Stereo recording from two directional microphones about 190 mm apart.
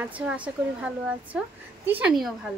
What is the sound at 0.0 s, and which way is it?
A woman's voice, 5° right (ahead or behind).